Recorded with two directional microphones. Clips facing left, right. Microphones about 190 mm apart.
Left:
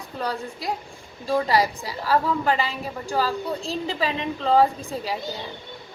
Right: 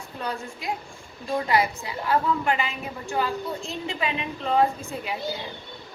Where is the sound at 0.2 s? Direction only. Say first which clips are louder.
Left 3 dB; 35° left (ahead or behind).